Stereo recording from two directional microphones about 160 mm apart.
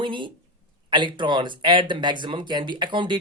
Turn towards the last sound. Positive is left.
turn(degrees=-30)  # may be behind; listen again after turning